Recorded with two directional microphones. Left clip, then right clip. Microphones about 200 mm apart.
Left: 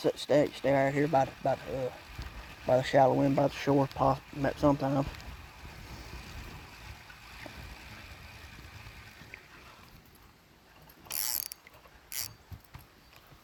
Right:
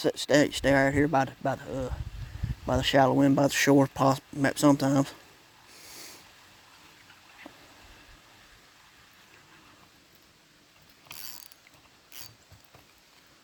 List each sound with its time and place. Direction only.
0.0 s speech: 55° right (ahead or behind)
3.2 s speech: 55° right (ahead or behind)
11.3 s mechanisms: 45° left (ahead or behind)